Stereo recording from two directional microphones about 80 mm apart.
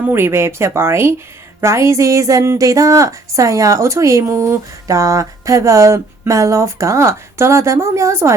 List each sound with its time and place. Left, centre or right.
0.1 s speech: right